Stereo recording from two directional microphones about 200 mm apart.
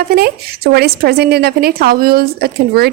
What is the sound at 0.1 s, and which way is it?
Speech, 50° right (ahead or behind).